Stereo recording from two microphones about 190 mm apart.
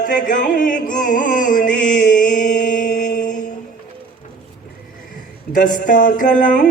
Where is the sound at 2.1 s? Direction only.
45° left (ahead or behind).